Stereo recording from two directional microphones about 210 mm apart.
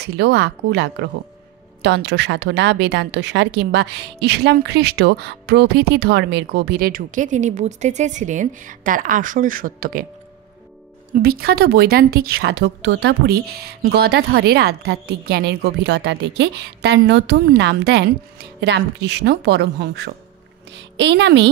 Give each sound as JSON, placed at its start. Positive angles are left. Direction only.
{"t": 0.0, "sound": "a woman's voice", "side_deg": -55}
{"t": 11.1, "sound": "a woman's voice", "side_deg": -45}